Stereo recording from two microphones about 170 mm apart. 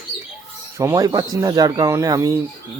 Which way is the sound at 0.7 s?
15° right (ahead or behind).